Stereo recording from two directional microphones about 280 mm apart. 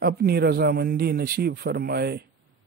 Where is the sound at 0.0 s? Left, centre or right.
Right.